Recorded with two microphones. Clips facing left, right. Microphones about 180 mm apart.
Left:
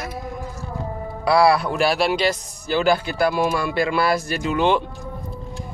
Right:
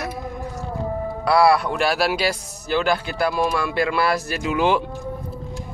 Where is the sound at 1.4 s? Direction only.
Centre (ahead or behind).